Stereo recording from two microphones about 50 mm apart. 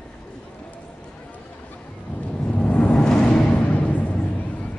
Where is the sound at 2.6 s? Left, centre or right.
Left.